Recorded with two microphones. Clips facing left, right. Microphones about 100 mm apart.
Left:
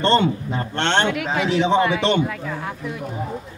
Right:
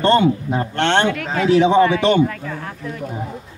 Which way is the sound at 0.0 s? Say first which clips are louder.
Right 3 dB; 15° right (ahead or behind).